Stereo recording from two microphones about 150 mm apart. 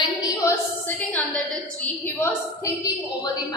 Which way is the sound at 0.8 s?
10° left (ahead or behind).